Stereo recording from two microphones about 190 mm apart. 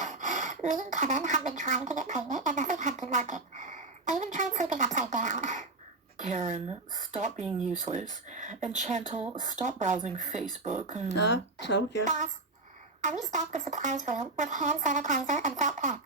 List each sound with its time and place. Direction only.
0.0 s speech: 40° right (ahead or behind)
11.2 s speech: 70° left (ahead or behind)
12.0 s a woman's voice: 40° right (ahead or behind)